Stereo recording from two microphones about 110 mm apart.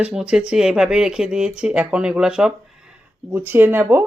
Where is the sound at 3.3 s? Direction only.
15° right (ahead or behind).